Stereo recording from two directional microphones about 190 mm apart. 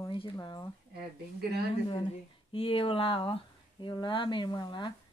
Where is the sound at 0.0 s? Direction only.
20° left (ahead or behind).